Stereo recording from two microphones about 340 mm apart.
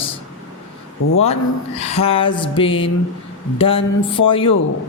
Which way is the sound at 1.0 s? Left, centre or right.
Left.